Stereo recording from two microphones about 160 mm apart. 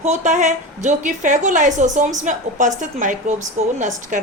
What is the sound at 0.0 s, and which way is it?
A woman's voice, 45° right (ahead or behind).